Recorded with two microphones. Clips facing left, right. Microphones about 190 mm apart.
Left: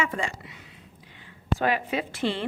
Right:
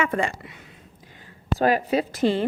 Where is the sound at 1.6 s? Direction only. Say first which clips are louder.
Right 6 dB; 40° right (ahead or behind).